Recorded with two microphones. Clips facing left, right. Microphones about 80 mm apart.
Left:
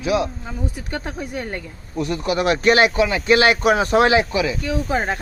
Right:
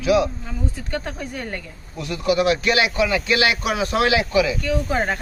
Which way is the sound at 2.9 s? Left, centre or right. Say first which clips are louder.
Left 3 dB; left.